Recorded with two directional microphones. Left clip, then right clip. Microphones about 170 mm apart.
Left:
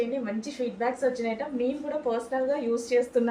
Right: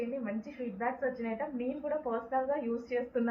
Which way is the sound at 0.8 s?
45° left (ahead or behind).